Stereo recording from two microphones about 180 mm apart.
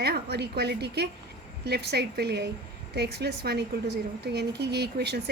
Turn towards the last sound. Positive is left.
turn(degrees=-65)  # may be behind; listen again after turning